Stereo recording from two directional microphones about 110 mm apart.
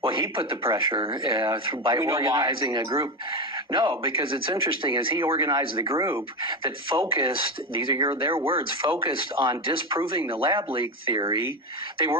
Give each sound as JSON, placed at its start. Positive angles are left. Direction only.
{"t": 0.0, "sound": "speech", "side_deg": -50}
{"t": 2.0, "sound": "speech", "side_deg": -30}
{"t": 2.5, "sound": "speech", "side_deg": -45}
{"t": 5.4, "sound": "speech", "side_deg": -35}
{"t": 6.5, "sound": "speech", "side_deg": -50}